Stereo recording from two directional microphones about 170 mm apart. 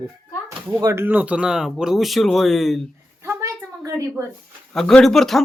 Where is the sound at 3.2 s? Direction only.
20° right (ahead or behind).